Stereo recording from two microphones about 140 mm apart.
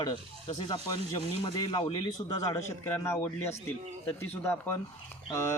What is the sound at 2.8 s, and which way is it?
A man's voice, 20° left (ahead or behind).